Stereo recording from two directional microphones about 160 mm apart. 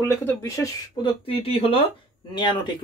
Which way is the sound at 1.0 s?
35° left (ahead or behind).